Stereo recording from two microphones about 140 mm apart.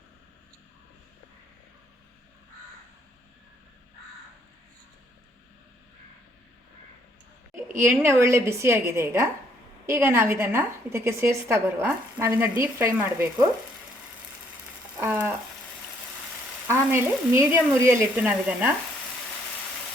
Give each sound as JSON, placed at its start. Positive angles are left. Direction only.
{"t": 7.8, "sound": "a woman's voice", "side_deg": -20}
{"t": 15.0, "sound": "frying", "side_deg": -15}
{"t": 16.6, "sound": "a woman's voice", "side_deg": -20}